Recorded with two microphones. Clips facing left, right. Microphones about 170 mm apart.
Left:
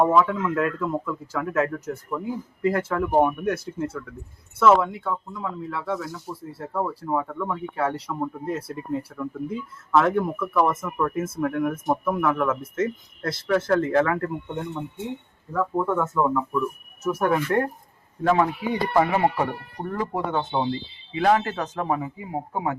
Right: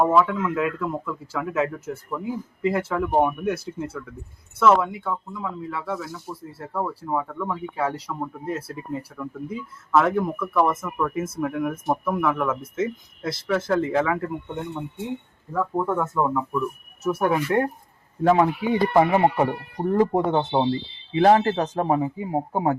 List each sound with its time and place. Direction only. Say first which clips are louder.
0.0 s a man's voice: even; 5° right (ahead or behind)
3.0 s speech: left 1 dB; 5° left (ahead or behind)
10.4 s a man's voice: right 1 dB; 5° right (ahead or behind)
18.2 s speech: right 2 dB; 25° right (ahead or behind)
20.0 s speech: right 8 dB; 45° right (ahead or behind)
20.3 s speech: right 4 dB; 25° right (ahead or behind)